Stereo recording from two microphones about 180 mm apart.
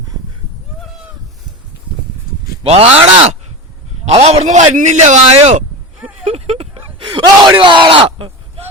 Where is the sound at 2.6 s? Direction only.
35° right (ahead or behind).